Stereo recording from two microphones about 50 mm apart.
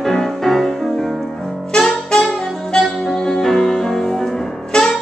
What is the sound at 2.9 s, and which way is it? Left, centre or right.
Music, centre.